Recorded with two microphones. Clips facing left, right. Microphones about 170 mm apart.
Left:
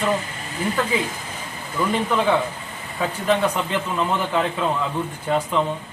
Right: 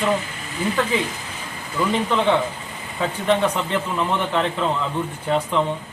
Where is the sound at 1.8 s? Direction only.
10° left (ahead or behind).